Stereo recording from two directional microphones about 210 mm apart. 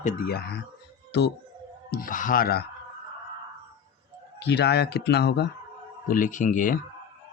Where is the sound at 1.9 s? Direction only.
40° left (ahead or behind).